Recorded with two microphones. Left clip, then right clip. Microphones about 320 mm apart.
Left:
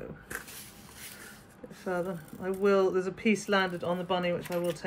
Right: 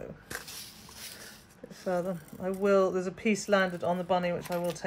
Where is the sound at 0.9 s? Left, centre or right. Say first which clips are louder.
Even; centre.